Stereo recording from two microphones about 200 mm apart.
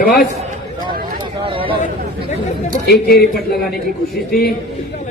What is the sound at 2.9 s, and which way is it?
Speech, 50° left (ahead or behind).